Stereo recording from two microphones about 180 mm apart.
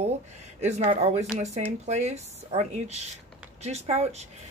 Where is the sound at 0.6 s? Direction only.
40° right (ahead or behind).